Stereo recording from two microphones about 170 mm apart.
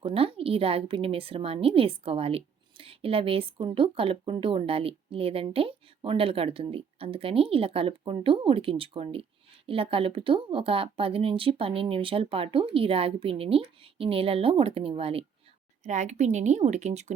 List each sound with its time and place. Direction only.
0.0 s a woman's voice: 35° right (ahead or behind)
15.8 s speech: 45° right (ahead or behind)